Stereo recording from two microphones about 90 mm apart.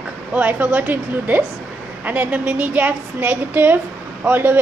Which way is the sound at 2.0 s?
15° right (ahead or behind).